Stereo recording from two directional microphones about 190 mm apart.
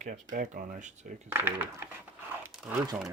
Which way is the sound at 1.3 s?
10° right (ahead or behind).